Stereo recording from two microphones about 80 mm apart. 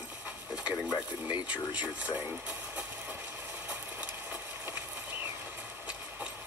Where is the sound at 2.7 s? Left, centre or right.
Centre.